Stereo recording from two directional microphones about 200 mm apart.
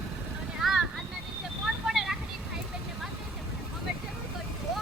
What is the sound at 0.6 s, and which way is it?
Boat, centre (ahead or behind).